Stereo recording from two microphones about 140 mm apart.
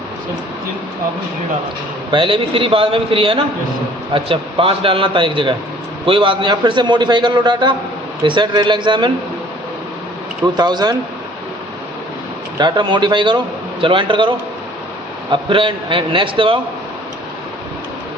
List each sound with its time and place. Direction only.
2.0 s a man's voice: 35° right (ahead or behind)
10.4 s speech: 30° right (ahead or behind)
12.5 s a man's voice: 30° right (ahead or behind)